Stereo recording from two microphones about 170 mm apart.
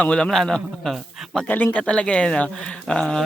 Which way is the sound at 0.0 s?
5° left (ahead or behind).